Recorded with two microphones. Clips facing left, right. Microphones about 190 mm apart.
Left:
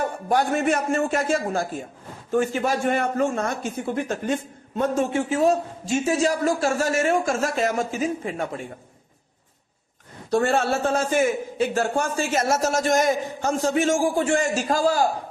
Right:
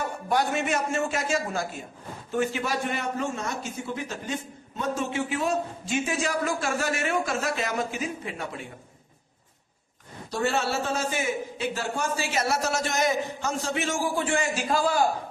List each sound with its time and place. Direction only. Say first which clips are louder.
0.3 s a man's voice: left 4 dB; 50° left (ahead or behind)
10.2 s a man's voice: left 6 dB; 50° left (ahead or behind)